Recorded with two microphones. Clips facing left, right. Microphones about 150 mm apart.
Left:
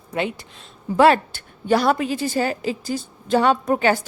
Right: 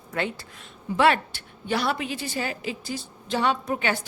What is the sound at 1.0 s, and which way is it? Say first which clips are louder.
A woman's voice: left 6 dB; 40° left (ahead or behind).